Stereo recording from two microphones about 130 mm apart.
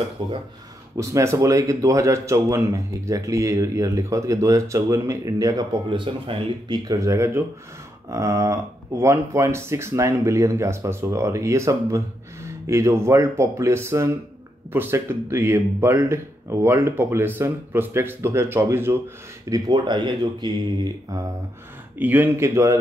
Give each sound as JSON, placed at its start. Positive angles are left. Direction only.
{"t": 0.2, "sound": "speech", "side_deg": -40}
{"t": 0.9, "sound": "speech", "side_deg": -25}
{"t": 6.8, "sound": "speech", "side_deg": -25}
{"t": 21.9, "sound": "speech", "side_deg": -15}